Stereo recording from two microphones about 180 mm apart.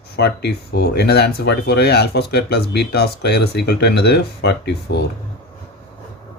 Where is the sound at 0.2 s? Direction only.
65° left (ahead or behind).